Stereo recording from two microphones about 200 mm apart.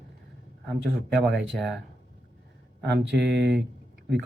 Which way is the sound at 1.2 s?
Centre (ahead or behind).